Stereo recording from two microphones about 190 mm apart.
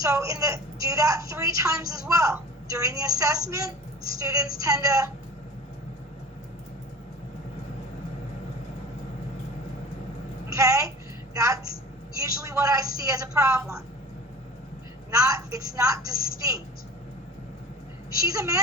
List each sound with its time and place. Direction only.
0.0 s a woman's voice: 15° right (ahead or behind)
10.5 s a woman's voice: 15° right (ahead or behind)
15.1 s a woman's voice: 15° right (ahead or behind)
18.2 s a woman's voice: 15° right (ahead or behind)